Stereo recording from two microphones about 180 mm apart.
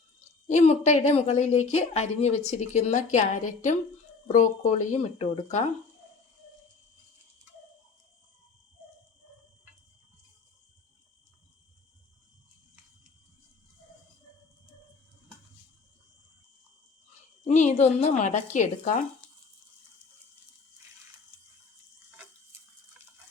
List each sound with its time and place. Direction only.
0.4 s a woman's voice: 40° left (ahead or behind)
17.4 s a woman's voice: 40° left (ahead or behind)